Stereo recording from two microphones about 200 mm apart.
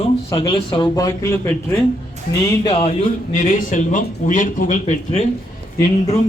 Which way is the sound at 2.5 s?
25° left (ahead or behind).